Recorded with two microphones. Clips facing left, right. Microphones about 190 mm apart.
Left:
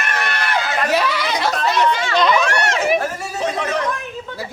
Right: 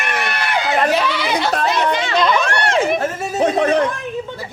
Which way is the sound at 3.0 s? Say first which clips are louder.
Right 3 dB; 20° right (ahead or behind).